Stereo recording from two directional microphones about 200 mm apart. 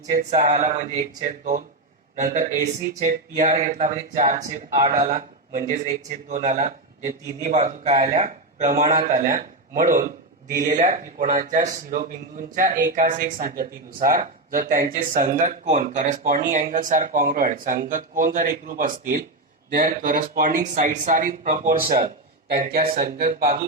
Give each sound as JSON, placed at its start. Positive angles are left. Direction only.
{"t": 0.3, "sound": "speech", "side_deg": -40}
{"t": 2.1, "sound": "speech", "side_deg": -40}
{"t": 4.8, "sound": "a man's voice", "side_deg": -20}
{"t": 5.0, "sound": "speech", "side_deg": -40}
{"t": 7.0, "sound": "a man's voice", "side_deg": -15}
{"t": 7.5, "sound": "a man's voice", "side_deg": -35}